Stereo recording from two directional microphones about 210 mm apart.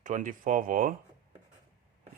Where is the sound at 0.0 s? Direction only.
40° right (ahead or behind).